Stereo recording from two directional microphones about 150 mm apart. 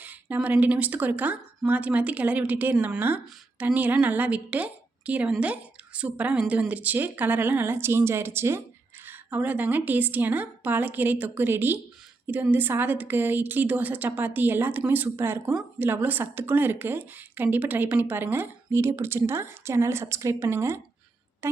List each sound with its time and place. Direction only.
0.0 s a woman's voice: 10° right (ahead or behind)
21.4 s music: 15° right (ahead or behind)